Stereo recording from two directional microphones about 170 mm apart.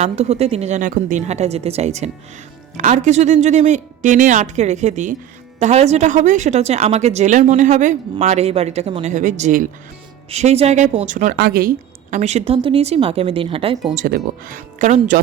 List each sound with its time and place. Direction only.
0.0 s a woman's voice: 40° right (ahead or behind)
11.3 s a woman's voice: 70° right (ahead or behind)
12.1 s a woman's voice: 40° right (ahead or behind)
14.1 s speech: 55° right (ahead or behind)